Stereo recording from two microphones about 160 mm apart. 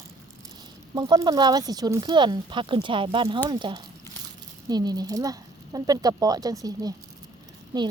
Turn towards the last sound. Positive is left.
turn(degrees=-25)  # may be behind; listen again after turning